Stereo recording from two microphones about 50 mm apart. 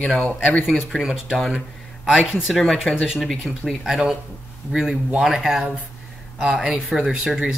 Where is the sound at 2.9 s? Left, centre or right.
Centre.